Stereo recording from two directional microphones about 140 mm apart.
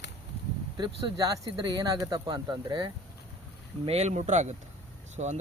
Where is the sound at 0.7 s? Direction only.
30° right (ahead or behind).